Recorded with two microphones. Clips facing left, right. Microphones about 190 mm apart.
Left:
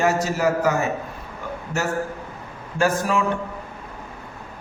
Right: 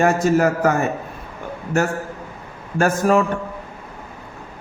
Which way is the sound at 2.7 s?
50° right (ahead or behind).